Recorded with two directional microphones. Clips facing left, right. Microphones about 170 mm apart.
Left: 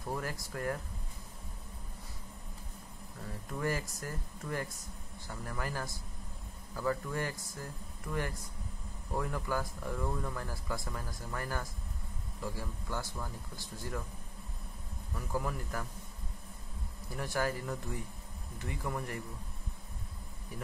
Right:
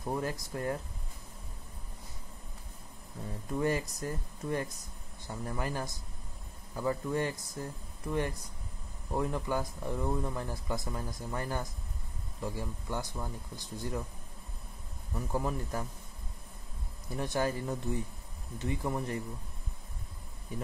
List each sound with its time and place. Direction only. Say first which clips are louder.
0.0 s speech: right 4 dB; 20° right (ahead or behind)
3.4 s speech: right 5 dB; 20° right (ahead or behind)
15.1 s speech: right 3 dB; 25° right (ahead or behind)
17.1 s speech: right 3 dB; 20° right (ahead or behind)
20.5 s speech: right 5 dB; 20° right (ahead or behind)